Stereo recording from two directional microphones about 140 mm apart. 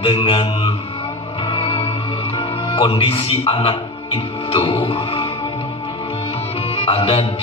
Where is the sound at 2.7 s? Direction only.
45° left (ahead or behind).